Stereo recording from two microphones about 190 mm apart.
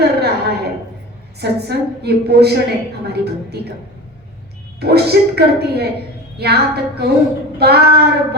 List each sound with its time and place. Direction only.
0.0 s a sound: 60° right (ahead or behind)
1.4 s a woman's voice: 60° right (ahead or behind)
4.8 s a woman's voice: 60° right (ahead or behind)